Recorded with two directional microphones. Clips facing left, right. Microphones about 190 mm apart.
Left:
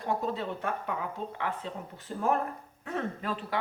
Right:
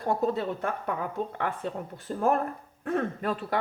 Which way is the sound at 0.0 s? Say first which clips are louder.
Right 5 dB; 45° right (ahead or behind).